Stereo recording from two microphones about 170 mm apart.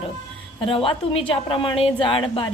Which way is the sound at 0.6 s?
30° left (ahead or behind).